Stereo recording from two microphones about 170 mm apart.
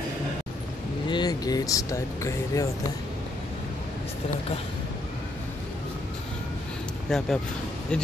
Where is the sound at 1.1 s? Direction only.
25° left (ahead or behind).